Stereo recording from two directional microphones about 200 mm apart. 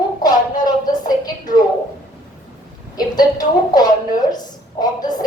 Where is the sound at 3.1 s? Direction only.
20° left (ahead or behind).